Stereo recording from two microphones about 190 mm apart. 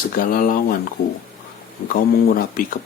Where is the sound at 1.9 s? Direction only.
50° left (ahead or behind).